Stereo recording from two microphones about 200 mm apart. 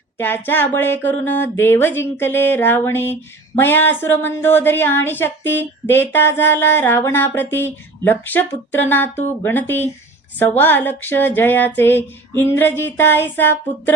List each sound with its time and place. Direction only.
0.2 s speech: 10° left (ahead or behind)